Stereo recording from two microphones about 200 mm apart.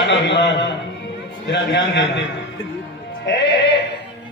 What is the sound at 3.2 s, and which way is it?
Speech, 65° left (ahead or behind).